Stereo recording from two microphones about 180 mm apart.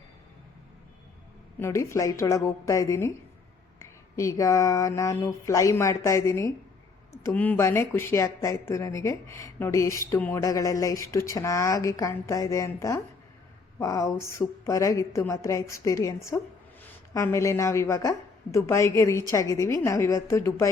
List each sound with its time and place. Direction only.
1.5 s speech: 15° left (ahead or behind)
4.1 s speech: 15° left (ahead or behind)